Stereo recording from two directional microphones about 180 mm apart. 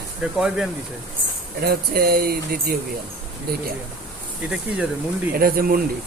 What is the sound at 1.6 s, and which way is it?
Speech, 60° right (ahead or behind).